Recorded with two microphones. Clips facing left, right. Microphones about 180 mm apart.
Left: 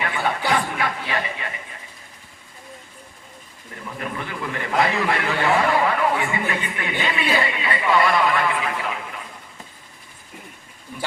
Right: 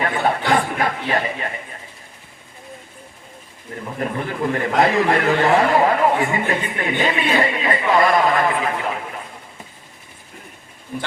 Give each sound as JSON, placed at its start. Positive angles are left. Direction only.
{"t": 0.0, "sound": "a sound", "side_deg": -40}
{"t": 4.0, "sound": "a man's voice", "side_deg": -40}
{"t": 10.9, "sound": "speech", "side_deg": -40}